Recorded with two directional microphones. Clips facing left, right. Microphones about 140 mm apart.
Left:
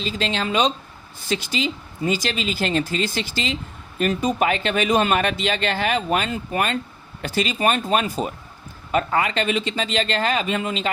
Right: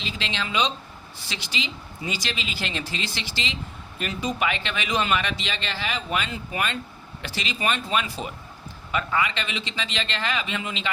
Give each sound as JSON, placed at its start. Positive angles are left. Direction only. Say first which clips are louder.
{"t": 0.0, "sound": "speech", "louder": "left 7 dB", "side_deg": 45}